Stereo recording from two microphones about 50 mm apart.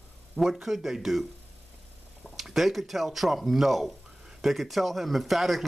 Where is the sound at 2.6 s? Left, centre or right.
Centre.